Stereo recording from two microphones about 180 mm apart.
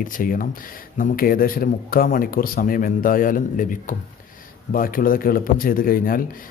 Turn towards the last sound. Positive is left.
turn(degrees=50)  # may be behind; listen again after turning